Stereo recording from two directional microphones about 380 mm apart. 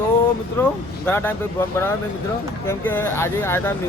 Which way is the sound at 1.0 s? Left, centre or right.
Centre.